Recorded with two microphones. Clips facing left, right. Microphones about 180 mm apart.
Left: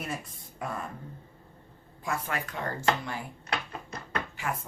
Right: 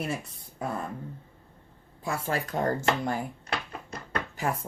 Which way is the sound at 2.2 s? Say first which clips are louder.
Right 6 dB; 35° right (ahead or behind).